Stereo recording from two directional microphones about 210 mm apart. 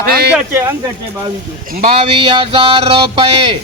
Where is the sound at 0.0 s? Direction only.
50° right (ahead or behind).